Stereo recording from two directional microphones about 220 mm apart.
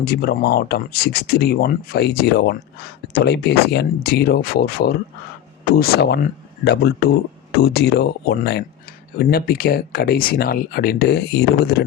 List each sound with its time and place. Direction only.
0.0 s speech: 45° left (ahead or behind)